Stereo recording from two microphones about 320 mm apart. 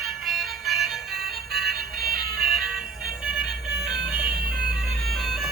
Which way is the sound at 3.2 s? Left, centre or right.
Centre.